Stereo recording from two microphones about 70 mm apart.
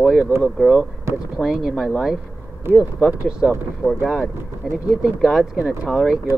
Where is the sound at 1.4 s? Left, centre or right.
Centre.